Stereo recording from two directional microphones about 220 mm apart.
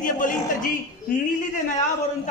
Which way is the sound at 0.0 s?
35° left (ahead or behind).